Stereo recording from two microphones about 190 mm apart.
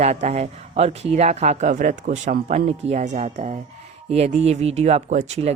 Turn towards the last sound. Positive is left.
turn(degrees=-35)  # may be behind; listen again after turning